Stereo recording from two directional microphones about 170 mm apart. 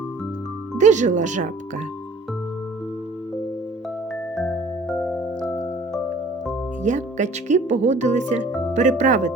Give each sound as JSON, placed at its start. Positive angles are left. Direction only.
{"t": 0.8, "sound": "speech", "side_deg": -45}
{"t": 6.8, "sound": "speech", "side_deg": -45}